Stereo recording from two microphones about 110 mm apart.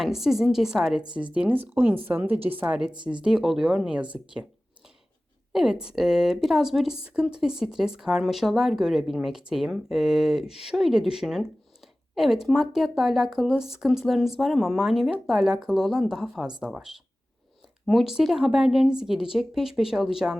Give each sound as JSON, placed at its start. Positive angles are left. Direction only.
{"t": 0.0, "sound": "speech", "side_deg": -5}
{"t": 5.5, "sound": "speech", "side_deg": -5}